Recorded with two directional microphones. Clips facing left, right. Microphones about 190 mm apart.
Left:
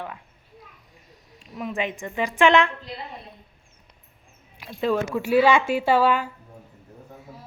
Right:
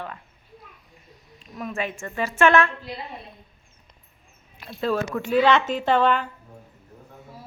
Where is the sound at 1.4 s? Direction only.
15° left (ahead or behind).